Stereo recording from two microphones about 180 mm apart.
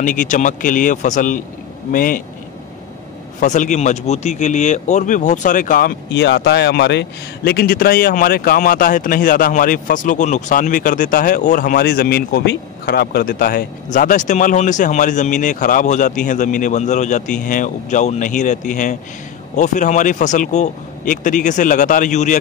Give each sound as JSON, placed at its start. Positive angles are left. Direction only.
{"t": 0.0, "sound": "speech", "side_deg": 45}
{"t": 3.3, "sound": "speech", "side_deg": 45}